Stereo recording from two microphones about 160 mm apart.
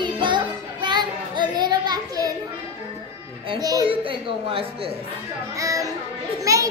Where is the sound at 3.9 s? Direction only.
35° right (ahead or behind).